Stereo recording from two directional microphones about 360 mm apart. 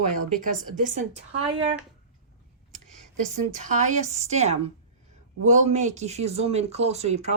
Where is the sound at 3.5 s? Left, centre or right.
Centre.